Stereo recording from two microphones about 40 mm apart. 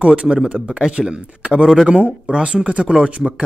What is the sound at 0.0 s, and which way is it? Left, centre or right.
Speech, right.